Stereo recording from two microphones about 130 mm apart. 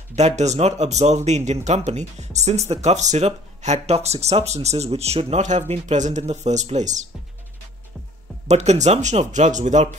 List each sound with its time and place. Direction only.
0.1 s speech: 60° right (ahead or behind)
8.5 s speech: 60° right (ahead or behind)